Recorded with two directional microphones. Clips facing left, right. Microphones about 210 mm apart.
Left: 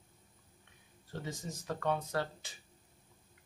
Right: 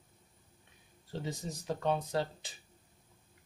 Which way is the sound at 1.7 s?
20° right (ahead or behind).